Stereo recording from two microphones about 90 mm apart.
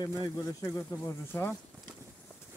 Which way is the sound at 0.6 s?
35° left (ahead or behind).